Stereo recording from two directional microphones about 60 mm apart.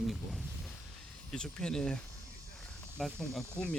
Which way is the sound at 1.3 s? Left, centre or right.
Centre.